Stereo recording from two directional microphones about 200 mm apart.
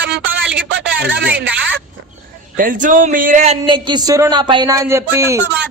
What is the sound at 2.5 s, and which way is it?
A man's voice, 40° right (ahead or behind).